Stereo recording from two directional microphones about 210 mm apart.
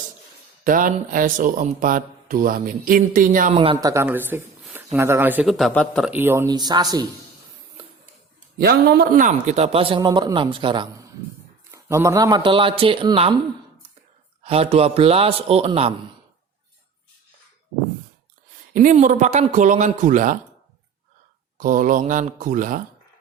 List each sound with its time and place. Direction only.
0.6 s speech: 40° right (ahead or behind); by 6.1 s 5° left (ahead or behind)
6.1 s a man's voice: 10° right (ahead or behind)
7.8 s printer: 25° right (ahead or behind)
8.5 s a man's voice: 45° right (ahead or behind); by 10.8 s 25° right (ahead or behind)
11.7 s a man's voice: 10° right (ahead or behind)
14.4 s a man's voice: 30° right (ahead or behind)
18.7 s speech: 35° right (ahead or behind)
21.6 s speech: 40° right (ahead or behind)